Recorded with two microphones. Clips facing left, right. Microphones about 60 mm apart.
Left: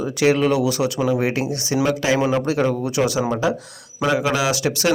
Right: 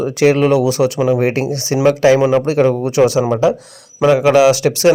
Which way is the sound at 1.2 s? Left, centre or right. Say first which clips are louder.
Right 5 dB; right.